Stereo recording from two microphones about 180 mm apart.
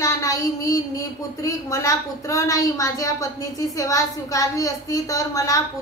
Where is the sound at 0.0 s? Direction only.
20° left (ahead or behind).